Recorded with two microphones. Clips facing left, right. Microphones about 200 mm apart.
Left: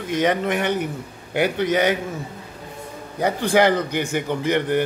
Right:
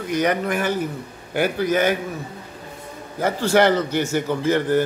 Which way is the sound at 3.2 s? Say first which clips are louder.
Even; 15° left (ahead or behind).